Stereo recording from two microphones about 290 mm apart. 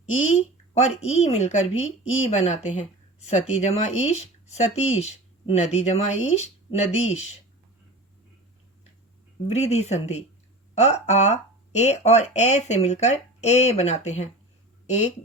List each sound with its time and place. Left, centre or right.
0.2 s speech: left
1.7 s speech: left
2.3 s speech: left
9.5 s speech: left